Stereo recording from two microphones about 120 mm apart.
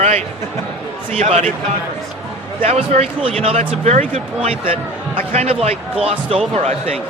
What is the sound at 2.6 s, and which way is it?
Speech, 65° right (ahead or behind).